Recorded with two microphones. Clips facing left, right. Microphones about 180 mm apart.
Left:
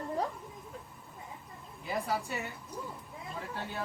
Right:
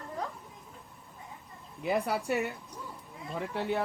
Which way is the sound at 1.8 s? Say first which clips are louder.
Right 4 dB; 65° right (ahead or behind).